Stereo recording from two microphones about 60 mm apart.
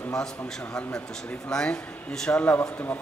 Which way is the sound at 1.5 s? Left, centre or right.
Centre.